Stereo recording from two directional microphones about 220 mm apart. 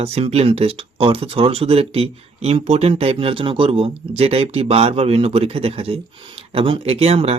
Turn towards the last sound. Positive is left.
turn(degrees=-30)  # may be behind; listen again after turning